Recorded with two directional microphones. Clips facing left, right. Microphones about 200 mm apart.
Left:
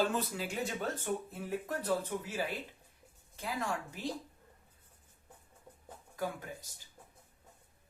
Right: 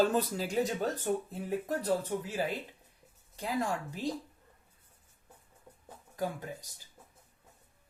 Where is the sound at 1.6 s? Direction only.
35° right (ahead or behind).